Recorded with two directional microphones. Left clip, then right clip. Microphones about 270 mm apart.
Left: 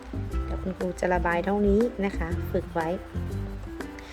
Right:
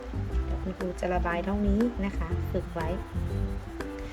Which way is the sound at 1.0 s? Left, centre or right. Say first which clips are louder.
Left 5 dB; centre.